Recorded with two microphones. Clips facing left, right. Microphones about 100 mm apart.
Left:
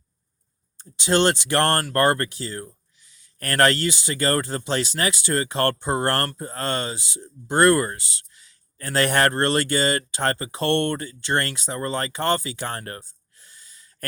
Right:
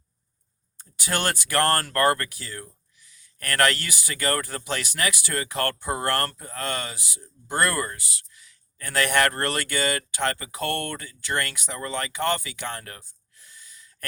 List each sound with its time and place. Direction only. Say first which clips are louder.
0.8 s speech: left 8 dB; 25° left (ahead or behind)